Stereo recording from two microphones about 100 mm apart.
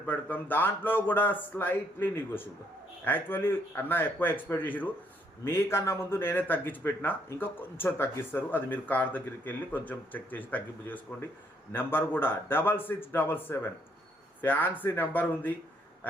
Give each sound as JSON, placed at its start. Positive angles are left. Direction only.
{"t": 0.0, "sound": "speech", "side_deg": 15}